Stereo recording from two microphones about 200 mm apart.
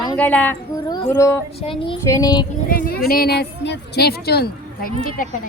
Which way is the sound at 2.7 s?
45° left (ahead or behind).